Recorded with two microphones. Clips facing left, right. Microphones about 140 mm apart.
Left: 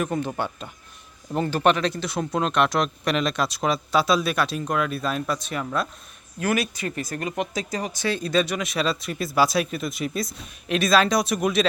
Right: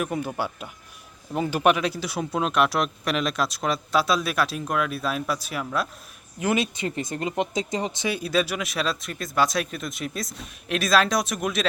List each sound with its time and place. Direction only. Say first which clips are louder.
0.0 s a man's voice: left 1 dB; 5° right (ahead or behind)
6.4 s speech: even; 20° right (ahead or behind)
8.0 s speech: left 3 dB; 10° right (ahead or behind)